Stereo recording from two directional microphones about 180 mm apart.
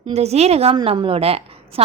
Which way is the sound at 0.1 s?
35° right (ahead or behind).